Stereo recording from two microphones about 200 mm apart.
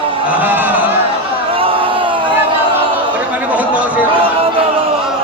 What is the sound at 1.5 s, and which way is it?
Crowd, 25° right (ahead or behind).